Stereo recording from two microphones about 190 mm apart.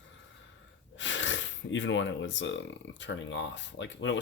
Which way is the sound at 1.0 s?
80° left.